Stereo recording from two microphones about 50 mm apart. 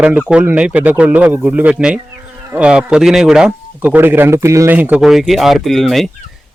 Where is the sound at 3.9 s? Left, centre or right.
Right.